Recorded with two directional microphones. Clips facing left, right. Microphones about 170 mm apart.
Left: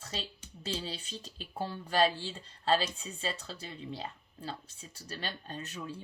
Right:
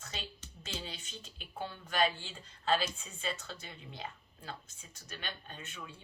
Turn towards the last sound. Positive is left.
turn(degrees=35)  # may be behind; listen again after turning